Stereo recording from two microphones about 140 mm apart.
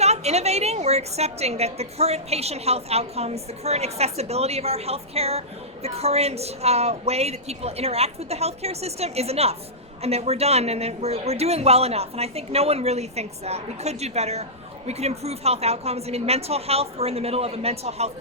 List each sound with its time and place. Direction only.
0.0 s a woman's voice: 50° right (ahead or behind)